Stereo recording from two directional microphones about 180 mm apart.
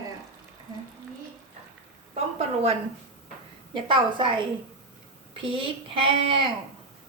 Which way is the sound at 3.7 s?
25° right (ahead or behind).